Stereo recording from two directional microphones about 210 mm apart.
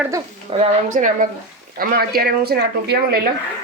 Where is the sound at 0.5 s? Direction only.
40° right (ahead or behind).